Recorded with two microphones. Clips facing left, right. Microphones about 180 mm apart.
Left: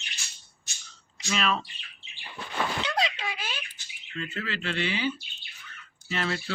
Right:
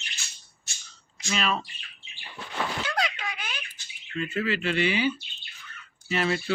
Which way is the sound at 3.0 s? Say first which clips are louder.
Left 1 dB; 25° left (ahead or behind).